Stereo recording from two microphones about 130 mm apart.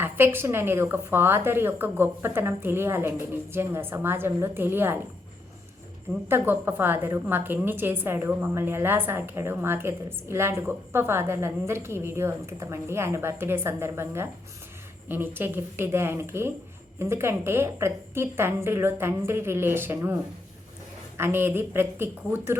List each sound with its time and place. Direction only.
0.0 s a woman's voice: 15° right (ahead or behind)
6.2 s a woman's voice: 15° right (ahead or behind)
21.2 s a woman's voice: 15° right (ahead or behind)